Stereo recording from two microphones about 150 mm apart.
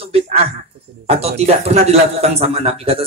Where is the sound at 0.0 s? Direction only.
40° right (ahead or behind).